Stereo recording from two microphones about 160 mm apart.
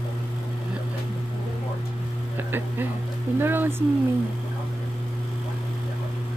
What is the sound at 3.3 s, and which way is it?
Speech, 15° right (ahead or behind).